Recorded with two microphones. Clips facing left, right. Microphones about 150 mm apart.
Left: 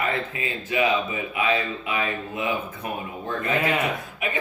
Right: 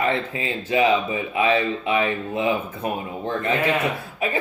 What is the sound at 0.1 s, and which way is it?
Speech, 30° right (ahead or behind).